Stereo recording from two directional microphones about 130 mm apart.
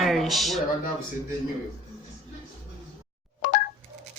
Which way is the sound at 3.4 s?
80° left.